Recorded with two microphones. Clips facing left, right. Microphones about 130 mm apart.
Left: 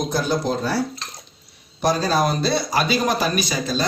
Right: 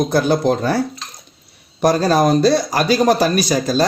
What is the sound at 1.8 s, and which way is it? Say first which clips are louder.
A man's voice: right 5 dB; 50° right (ahead or behind).